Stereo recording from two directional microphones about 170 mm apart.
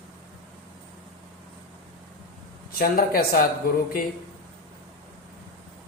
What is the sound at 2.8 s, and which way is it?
Speech, 55° left (ahead or behind).